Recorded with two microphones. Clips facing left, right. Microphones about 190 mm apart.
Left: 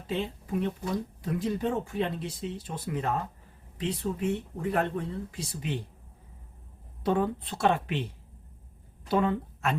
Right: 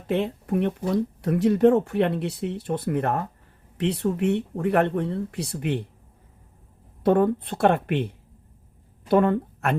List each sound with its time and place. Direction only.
0.1 s speech: 65° right (ahead or behind)
7.0 s a woman's voice: 55° right (ahead or behind)